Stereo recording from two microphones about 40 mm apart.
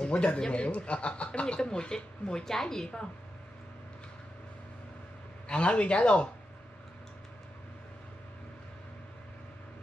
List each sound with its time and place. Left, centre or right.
0.0 s speech: left
5.5 s speech: left